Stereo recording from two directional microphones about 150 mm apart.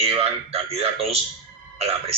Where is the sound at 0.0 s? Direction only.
40° right (ahead or behind).